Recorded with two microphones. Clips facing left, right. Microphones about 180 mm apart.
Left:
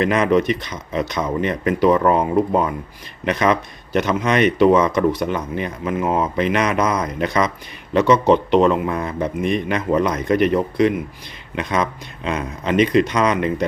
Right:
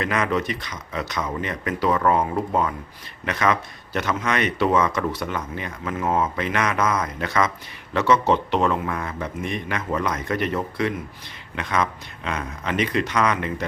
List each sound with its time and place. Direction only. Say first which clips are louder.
0.0 s speech: left 7 dB; 20° left (ahead or behind)